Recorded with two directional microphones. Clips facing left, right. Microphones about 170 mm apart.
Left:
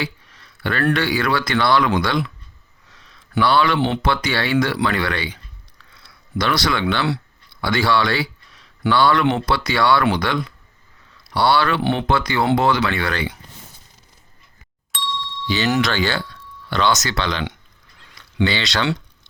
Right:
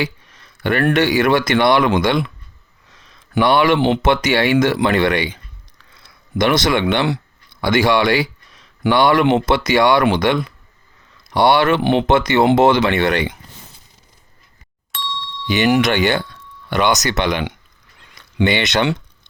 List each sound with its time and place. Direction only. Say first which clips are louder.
0.0 s a sound: right 4 dB; 20° right (ahead or behind)
0.6 s speech: right 4 dB; 20° right (ahead or behind)
2.9 s a sound: right 3 dB; 20° right (ahead or behind)
4.0 s speech: right 6 dB; 20° right (ahead or behind)
14.9 s ding: even; centre (ahead or behind)
15.4 s speech: right 5 dB; 15° right (ahead or behind)